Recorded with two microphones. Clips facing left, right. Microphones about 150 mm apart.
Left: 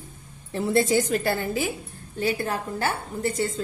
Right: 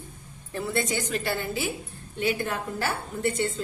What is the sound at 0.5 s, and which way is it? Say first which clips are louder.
A woman's voice: left 7 dB; 30° left (ahead or behind).